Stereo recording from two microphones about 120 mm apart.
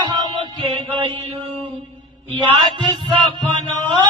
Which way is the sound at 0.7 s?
45° right (ahead or behind).